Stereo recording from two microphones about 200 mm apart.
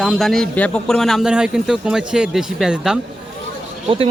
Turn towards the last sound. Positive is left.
turn(degrees=-30)  # may be behind; listen again after turning